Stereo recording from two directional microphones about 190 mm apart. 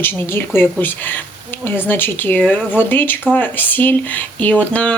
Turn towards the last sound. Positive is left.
turn(degrees=5)  # may be behind; listen again after turning